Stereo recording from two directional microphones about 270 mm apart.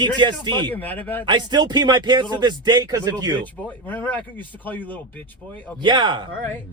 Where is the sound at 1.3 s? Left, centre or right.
Centre.